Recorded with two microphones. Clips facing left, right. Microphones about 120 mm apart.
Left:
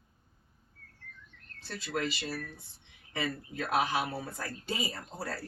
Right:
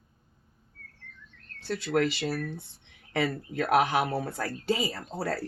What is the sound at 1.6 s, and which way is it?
Speech, 70° right (ahead or behind).